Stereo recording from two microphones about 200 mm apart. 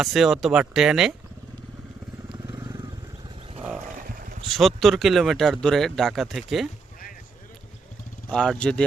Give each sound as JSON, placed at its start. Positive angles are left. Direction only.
{"t": 0.0, "sound": "speech", "side_deg": 0}
{"t": 2.5, "sound": "vehicle", "side_deg": -20}
{"t": 4.5, "sound": "speech", "side_deg": 0}
{"t": 8.3, "sound": "speech", "side_deg": 5}